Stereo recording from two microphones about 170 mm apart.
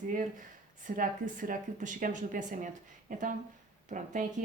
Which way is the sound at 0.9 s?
50° right (ahead or behind).